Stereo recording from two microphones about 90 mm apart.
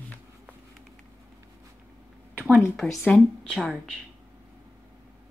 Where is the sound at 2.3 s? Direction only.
15° right (ahead or behind).